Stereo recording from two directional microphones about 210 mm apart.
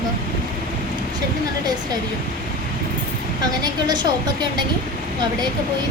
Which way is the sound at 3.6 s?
20° right (ahead or behind).